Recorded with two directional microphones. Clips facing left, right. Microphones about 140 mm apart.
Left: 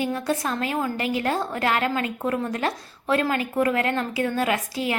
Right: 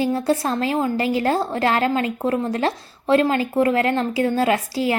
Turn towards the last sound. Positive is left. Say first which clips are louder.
# right 5 dB
turn(degrees=-30)  # may be behind; listen again after turning